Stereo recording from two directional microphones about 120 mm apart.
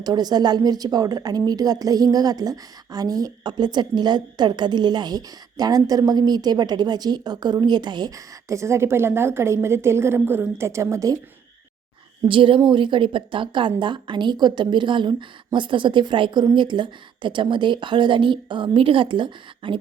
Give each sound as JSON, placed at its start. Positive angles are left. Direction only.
{"t": 0.0, "sound": "a woman's voice", "side_deg": -35}
{"t": 12.3, "sound": "a woman's voice", "side_deg": -45}